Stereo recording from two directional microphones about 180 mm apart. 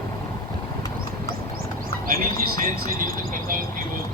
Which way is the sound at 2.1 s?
55° right (ahead or behind).